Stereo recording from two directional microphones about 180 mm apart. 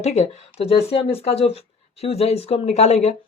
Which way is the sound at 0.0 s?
40° left (ahead or behind).